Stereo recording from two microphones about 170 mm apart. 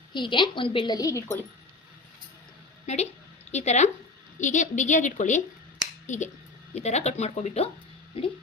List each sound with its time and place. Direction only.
0.1 s a woman's voice: 30° left (ahead or behind)
2.8 s a woman's voice: 40° left (ahead or behind)